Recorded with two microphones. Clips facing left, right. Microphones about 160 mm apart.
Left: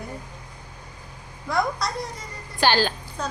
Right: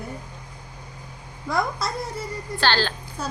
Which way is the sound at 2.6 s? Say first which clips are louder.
Left 2 dB; 15° left (ahead or behind).